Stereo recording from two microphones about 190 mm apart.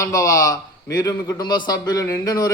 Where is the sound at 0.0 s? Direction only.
15° left (ahead or behind).